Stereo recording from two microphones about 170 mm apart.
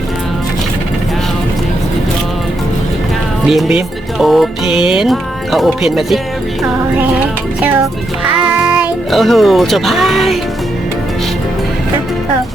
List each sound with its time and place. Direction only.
3.4 s music: centre (ahead or behind)
8.4 s a child's voice: 5° right (ahead or behind)